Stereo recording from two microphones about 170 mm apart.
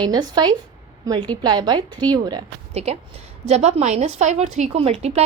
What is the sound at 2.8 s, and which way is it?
A woman's voice, 40° right (ahead or behind).